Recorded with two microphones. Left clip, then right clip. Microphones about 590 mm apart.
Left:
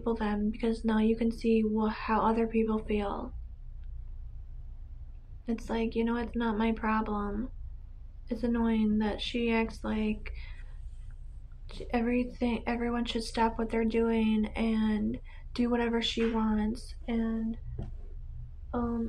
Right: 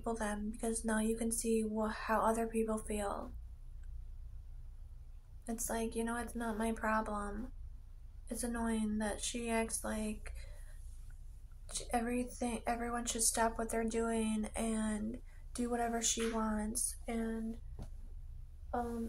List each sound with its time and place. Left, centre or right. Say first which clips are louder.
0.0 s a woman's voice: left 7 dB; right
5.5 s a woman's voice: left 6 dB; right
11.6 s a woman's voice: left 5 dB; right